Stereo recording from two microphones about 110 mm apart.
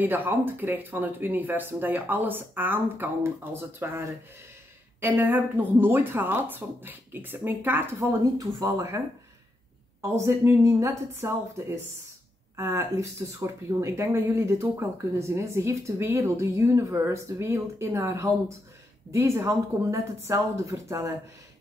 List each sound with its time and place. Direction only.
0.0 s speech: 20° right (ahead or behind)
10.0 s speech: 25° right (ahead or behind)